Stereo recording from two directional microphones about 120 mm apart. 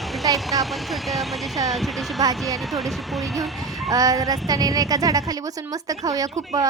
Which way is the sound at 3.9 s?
30° right (ahead or behind).